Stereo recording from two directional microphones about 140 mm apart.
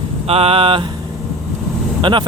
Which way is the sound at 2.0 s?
35° right (ahead or behind).